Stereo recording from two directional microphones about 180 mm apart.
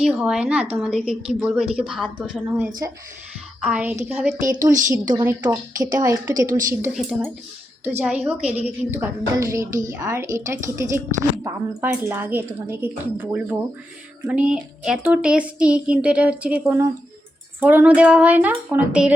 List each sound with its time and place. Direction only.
0.0 s a woman's voice: 5° right (ahead or behind)
4.6 s speech: 20° right (ahead or behind)
6.9 s a woman's voice: 5° right (ahead or behind)